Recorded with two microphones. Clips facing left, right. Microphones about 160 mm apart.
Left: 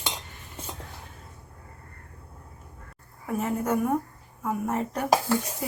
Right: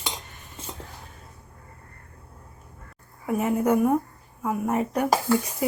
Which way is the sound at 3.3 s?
15° right (ahead or behind).